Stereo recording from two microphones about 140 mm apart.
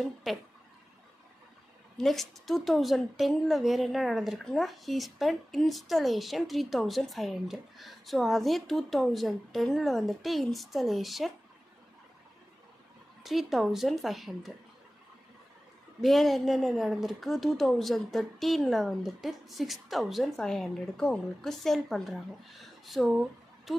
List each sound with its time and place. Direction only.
0.0 s a woman's voice: centre (ahead or behind)
2.0 s a woman's voice: centre (ahead or behind)
13.2 s a woman's voice: centre (ahead or behind)
16.0 s a woman's voice: centre (ahead or behind)